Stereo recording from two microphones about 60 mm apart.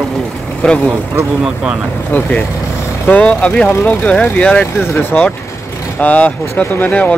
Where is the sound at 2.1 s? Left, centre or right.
Left.